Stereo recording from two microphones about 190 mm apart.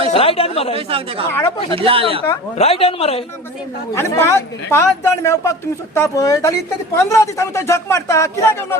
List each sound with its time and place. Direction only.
0.1 s speech: 30° left (ahead or behind)
0.8 s speech: 30° right (ahead or behind)
1.3 s speech: 15° left (ahead or behind)
1.7 s speech: 30° right (ahead or behind)
2.6 s speech: 30° left (ahead or behind)
3.9 s speech: 15° left (ahead or behind)